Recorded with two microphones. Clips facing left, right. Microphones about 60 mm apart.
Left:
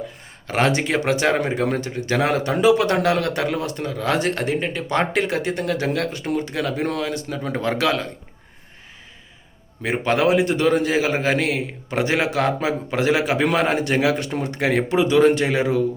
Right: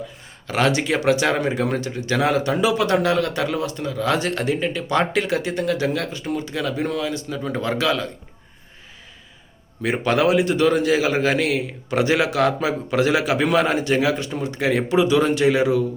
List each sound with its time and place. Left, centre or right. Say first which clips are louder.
0.4 s a man's voice: even; left
9.8 s a man's voice: even; left
14.0 s a man's voice: left 1 dB; left